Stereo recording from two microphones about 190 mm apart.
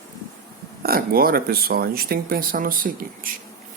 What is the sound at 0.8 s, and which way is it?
Speech, 50° right (ahead or behind).